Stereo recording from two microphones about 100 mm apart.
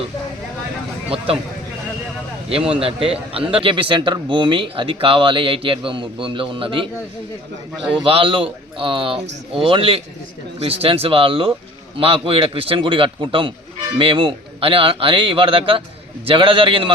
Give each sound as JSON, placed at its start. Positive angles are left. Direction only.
{"t": 2.5, "sound": "a man's voice", "side_deg": -70}
{"t": 7.9, "sound": "a man's voice", "side_deg": -60}